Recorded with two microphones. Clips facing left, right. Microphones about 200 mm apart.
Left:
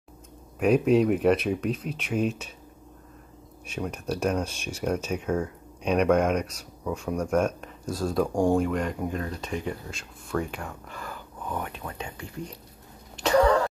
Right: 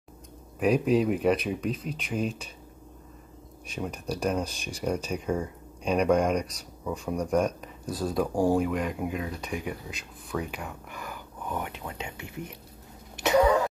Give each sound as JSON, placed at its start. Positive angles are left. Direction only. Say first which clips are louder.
{"t": 0.6, "sound": "speech", "louder": "left 3 dB", "side_deg": 0}
{"t": 3.8, "sound": "speech", "louder": "left 2 dB", "side_deg": 5}
{"t": 10.9, "sound": "speech", "louder": "left 1 dB", "side_deg": -15}
{"t": 13.1, "sound": "a sound", "louder": "left 1 dB", "side_deg": -20}
{"t": 13.4, "sound": "throat clearing", "louder": "left 1 dB", "side_deg": -10}